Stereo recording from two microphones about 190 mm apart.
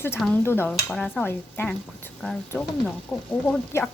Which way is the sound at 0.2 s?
10° left (ahead or behind).